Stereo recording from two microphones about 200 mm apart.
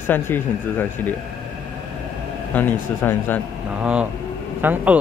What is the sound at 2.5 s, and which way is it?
Speech, 10° left (ahead or behind).